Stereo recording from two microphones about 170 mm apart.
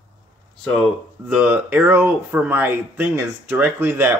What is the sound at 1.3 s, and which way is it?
Speech, 10° right (ahead or behind).